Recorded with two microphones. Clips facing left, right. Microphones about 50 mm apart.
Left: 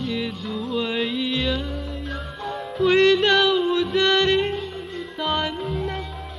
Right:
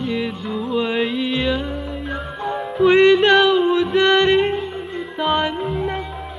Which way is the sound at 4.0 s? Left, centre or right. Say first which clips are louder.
Right 5 dB; centre.